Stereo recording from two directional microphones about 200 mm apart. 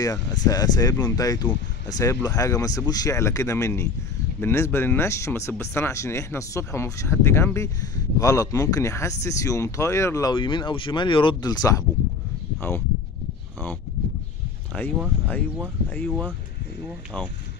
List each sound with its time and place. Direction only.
0.0 s speech: 20° left (ahead or behind)
14.7 s speech: 10° left (ahead or behind)
16.1 s speech: 5° right (ahead or behind)